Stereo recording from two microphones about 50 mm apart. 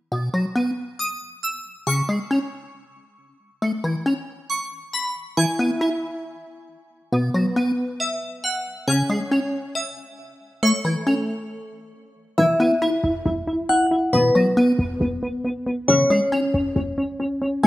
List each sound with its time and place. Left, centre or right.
0.1 s music: centre
3.5 s music: centre
7.1 s music: centre
12.4 s music: centre